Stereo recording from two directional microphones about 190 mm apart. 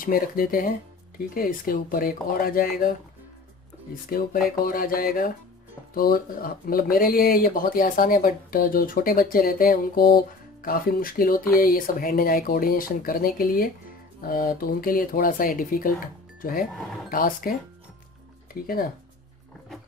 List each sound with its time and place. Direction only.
0.0 s speech: 50° left (ahead or behind)
4.1 s speech: 50° left (ahead or behind)